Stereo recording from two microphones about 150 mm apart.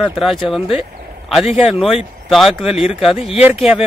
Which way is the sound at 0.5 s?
Centre (ahead or behind).